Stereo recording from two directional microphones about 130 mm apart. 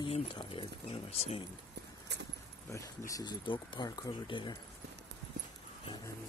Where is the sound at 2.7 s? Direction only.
25° left (ahead or behind).